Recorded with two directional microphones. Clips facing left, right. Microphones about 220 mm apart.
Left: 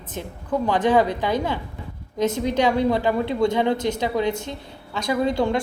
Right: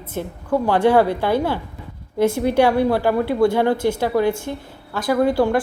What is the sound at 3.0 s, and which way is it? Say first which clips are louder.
Speech: right 3 dB; 20° left (ahead or behind).